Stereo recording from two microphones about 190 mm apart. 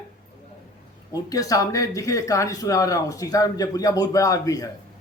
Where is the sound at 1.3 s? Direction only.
20° left (ahead or behind).